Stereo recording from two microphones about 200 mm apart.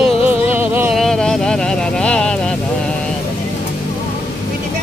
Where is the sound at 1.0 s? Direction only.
Centre (ahead or behind).